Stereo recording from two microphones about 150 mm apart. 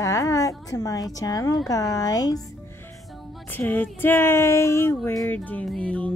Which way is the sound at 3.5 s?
15° left (ahead or behind).